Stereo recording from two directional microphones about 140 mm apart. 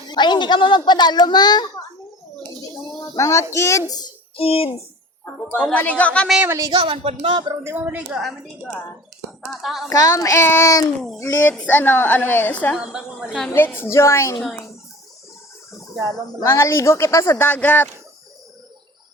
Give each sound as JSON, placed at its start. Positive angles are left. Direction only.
{"t": 0.1, "sound": "a child's voice", "side_deg": 35}
{"t": 3.2, "sound": "speech", "side_deg": 20}
{"t": 4.4, "sound": "speech", "side_deg": 45}
{"t": 5.2, "sound": "a woman's voice", "side_deg": 10}
{"t": 6.7, "sound": "a woman's voice", "side_deg": -35}
{"t": 7.6, "sound": "a woman's voice", "side_deg": -15}
{"t": 9.5, "sound": "a woman's voice", "side_deg": 0}
{"t": 9.9, "sound": "speech", "side_deg": 25}
{"t": 11.2, "sound": "a woman's voice", "side_deg": 10}
{"t": 12.7, "sound": "a woman's voice", "side_deg": -5}
{"t": 13.5, "sound": "speech", "side_deg": 15}
{"t": 16.4, "sound": "speech", "side_deg": 20}